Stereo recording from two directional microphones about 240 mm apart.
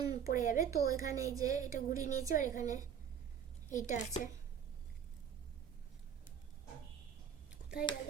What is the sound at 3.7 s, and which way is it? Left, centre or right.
Speech, left.